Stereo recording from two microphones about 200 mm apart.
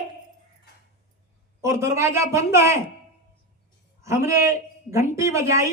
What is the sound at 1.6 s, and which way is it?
Speech, 15° right (ahead or behind).